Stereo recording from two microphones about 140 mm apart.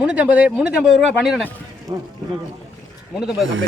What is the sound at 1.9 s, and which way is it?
Speech, 20° right (ahead or behind).